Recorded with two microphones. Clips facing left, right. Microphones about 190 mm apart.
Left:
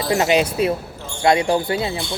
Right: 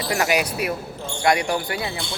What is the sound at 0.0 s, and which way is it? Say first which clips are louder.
Speech: left 5 dB; 25° left (ahead or behind).